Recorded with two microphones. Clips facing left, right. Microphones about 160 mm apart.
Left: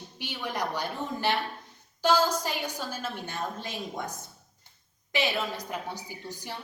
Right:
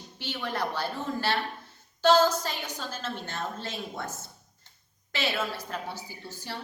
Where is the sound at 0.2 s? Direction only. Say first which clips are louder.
Right 1 dB; 15° left (ahead or behind).